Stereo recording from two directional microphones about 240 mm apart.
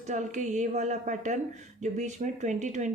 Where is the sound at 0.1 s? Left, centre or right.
Right.